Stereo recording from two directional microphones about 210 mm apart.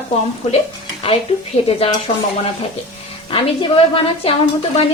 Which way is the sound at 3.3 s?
25° left (ahead or behind).